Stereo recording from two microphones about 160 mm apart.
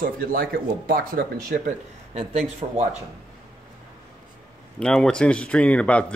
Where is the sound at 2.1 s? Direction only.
40° right (ahead or behind).